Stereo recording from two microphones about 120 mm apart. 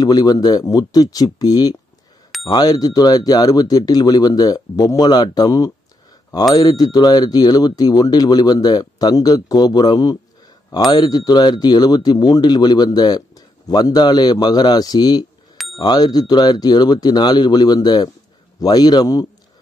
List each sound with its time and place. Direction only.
0.0 s speech: 35° left (ahead or behind)
15.5 s bicycle bell: centre (ahead or behind)
15.8 s speech: 35° left (ahead or behind)